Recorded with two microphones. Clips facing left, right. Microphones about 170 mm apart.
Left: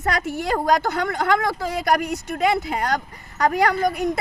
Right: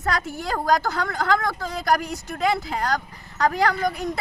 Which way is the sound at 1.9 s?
Centre (ahead or behind).